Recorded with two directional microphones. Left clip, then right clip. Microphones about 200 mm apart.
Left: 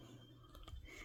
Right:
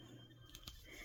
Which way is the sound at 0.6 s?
15° left (ahead or behind).